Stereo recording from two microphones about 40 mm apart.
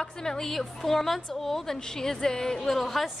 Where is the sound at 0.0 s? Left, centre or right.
Centre.